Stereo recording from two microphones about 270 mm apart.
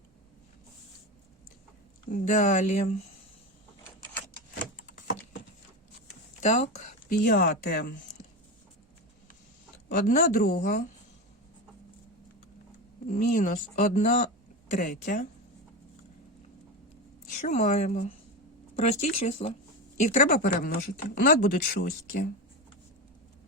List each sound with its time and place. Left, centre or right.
2.0 s speech: left
4.9 s a sound: left
6.4 s speech: left
9.9 s speech: left
13.1 s speech: left
17.4 s speech: left